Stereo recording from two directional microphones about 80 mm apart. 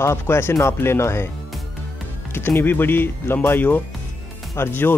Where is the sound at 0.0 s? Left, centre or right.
Left.